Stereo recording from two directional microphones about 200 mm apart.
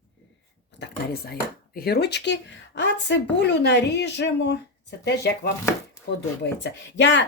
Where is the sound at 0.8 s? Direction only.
50° left (ahead or behind).